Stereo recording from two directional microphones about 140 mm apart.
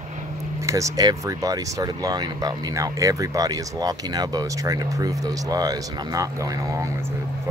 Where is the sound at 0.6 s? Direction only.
20° right (ahead or behind).